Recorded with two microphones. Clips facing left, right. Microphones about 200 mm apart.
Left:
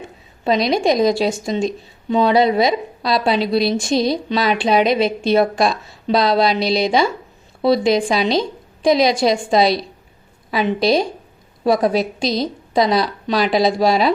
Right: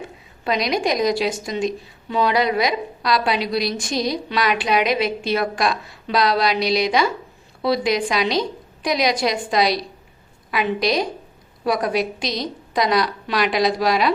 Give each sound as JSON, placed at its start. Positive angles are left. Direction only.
{"t": 0.4, "sound": "a woman's voice", "side_deg": 30}